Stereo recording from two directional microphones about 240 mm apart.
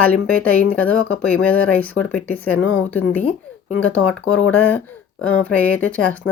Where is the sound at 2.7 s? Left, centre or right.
Left.